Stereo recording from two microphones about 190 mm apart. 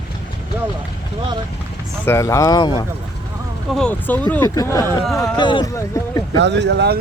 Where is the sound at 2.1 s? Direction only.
15° left (ahead or behind).